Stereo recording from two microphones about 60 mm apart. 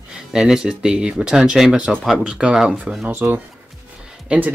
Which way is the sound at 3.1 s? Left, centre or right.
Right.